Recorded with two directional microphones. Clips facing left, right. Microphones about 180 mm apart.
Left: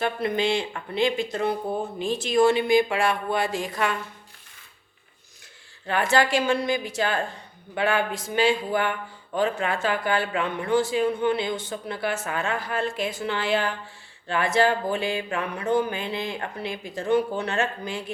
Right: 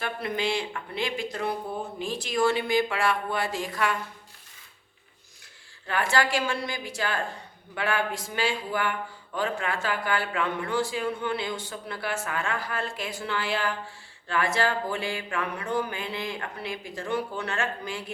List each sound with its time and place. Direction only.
0.0 s speech: 25° left (ahead or behind)
5.9 s speech: 20° left (ahead or behind)